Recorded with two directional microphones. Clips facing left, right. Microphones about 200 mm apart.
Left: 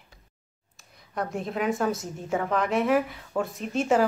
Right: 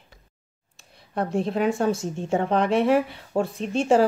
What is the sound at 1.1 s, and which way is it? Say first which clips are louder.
A woman's voice: right 5 dB; 30° right (ahead or behind).